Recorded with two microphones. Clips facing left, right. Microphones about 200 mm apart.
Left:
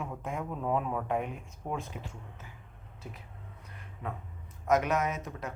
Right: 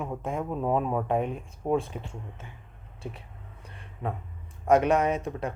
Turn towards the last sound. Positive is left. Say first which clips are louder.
# right 7 dB
turn(degrees=-30)  # may be behind; listen again after turning